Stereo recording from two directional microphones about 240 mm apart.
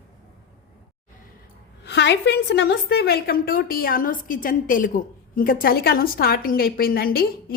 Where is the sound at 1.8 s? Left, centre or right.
Left.